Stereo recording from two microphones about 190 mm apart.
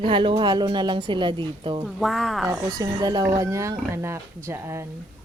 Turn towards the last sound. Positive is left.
turn(degrees=-15)  # may be behind; listen again after turning